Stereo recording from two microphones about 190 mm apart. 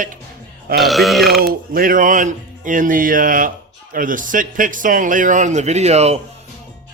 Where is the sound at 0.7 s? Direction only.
Centre (ahead or behind).